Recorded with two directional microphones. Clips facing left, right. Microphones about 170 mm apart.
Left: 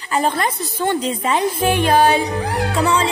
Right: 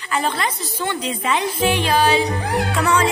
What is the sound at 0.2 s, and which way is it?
Speech, 45° left (ahead or behind).